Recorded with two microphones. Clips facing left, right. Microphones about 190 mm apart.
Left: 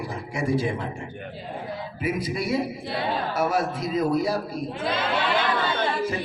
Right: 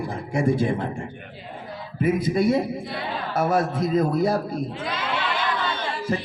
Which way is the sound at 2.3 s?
50° right (ahead or behind).